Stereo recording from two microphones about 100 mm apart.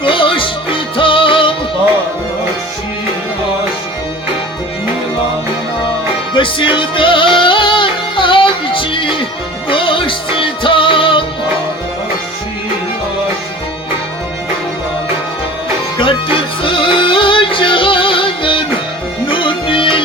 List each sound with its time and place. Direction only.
0.0 s music: 60° left (ahead or behind)
6.3 s music: 60° left (ahead or behind)
16.6 s music: 60° left (ahead or behind)